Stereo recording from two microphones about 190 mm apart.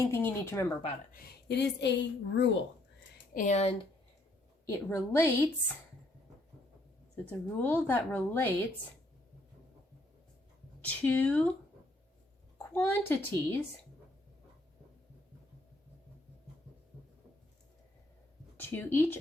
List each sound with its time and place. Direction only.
0.1 s a woman's voice: 10° left (ahead or behind)
1.1 s a woman's voice: 55° left (ahead or behind)
3.3 s speech: 40° left (ahead or behind)
4.6 s a woman's voice: 15° left (ahead or behind)
7.3 s a woman's voice: 10° left (ahead or behind)
10.8 s a woman's voice: 10° left (ahead or behind)
12.7 s a woman's voice: 10° left (ahead or behind)
18.5 s speech: 10° left (ahead or behind)